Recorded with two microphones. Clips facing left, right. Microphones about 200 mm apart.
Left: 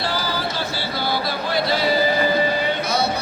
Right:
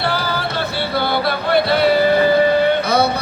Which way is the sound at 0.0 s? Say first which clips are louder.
Right 3 dB; 60° right (ahead or behind).